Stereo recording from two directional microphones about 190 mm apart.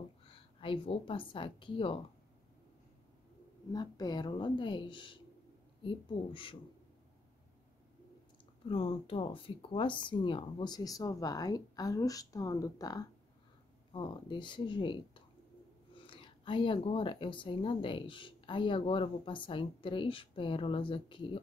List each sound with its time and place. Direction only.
0.3 s a woman's voice: 30° left (ahead or behind)
3.7 s speech: 20° left (ahead or behind)
8.6 s speech: 30° left (ahead or behind)